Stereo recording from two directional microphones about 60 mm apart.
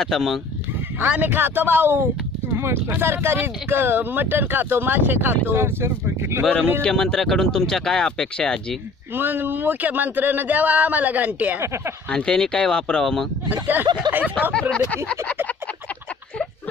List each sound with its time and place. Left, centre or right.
0.0 s speech: centre
0.9 s speech: right
6.8 s speech: centre
9.1 s speech: right
11.6 s speech: right
12.1 s speech: centre
13.5 s speech: right
14.5 s speech: centre